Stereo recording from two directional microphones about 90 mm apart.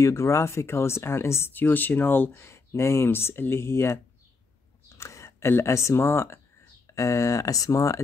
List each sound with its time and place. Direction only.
0.0 s speech: 30° left (ahead or behind)